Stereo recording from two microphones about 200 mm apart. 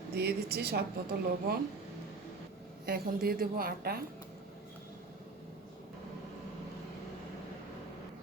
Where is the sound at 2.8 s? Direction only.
50° right (ahead or behind).